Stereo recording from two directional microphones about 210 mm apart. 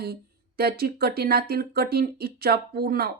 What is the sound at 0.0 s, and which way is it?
Speech, 45° right (ahead or behind).